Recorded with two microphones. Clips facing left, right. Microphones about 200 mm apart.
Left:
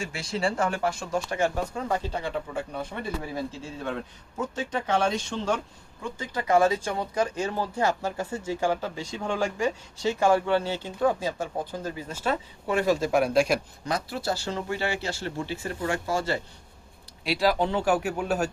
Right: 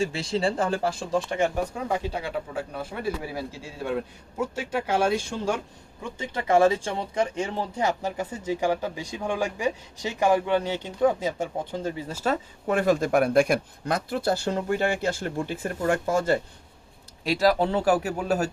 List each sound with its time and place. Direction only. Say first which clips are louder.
0.0 s speech: right 4 dB; 30° right (ahead or behind); by 5.5 s 10° right (ahead or behind)
6.0 s speech: even; 20° right (ahead or behind)
12.0 s speech: right 2 dB; 40° right (ahead or behind)